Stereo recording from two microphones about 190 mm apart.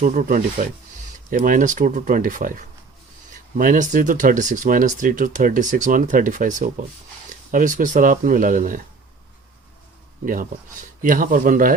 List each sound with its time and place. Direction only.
0.0 s speech: 40° right (ahead or behind)
10.2 s speech: 45° right (ahead or behind)